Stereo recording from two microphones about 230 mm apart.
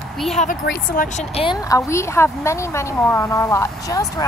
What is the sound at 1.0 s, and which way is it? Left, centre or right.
A woman's voice, left.